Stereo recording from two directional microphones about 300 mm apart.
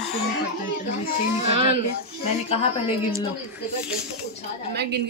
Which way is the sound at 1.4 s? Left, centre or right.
Right.